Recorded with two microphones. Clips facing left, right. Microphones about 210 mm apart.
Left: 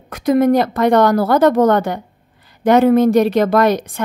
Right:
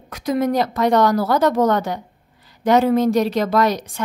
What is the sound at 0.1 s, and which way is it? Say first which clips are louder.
A woman's voice: left 6 dB; 55° left (ahead or behind).